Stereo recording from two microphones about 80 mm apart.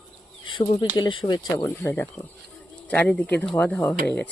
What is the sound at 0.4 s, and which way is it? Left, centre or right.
Speech, left.